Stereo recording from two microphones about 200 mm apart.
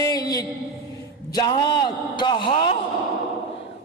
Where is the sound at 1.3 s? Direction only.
20° left (ahead or behind).